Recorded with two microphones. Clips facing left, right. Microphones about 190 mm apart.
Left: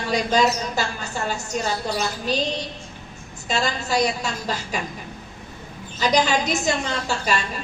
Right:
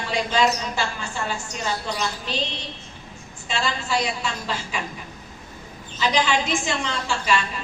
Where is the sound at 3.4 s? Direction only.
40° left (ahead or behind).